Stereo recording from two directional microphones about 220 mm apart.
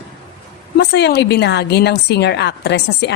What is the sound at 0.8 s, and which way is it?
Speech, 50° left (ahead or behind).